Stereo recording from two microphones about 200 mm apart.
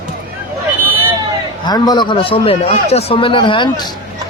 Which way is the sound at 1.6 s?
20° left (ahead or behind).